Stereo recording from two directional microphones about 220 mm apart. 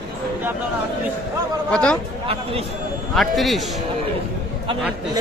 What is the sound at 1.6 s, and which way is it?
Speech, 5° left (ahead or behind).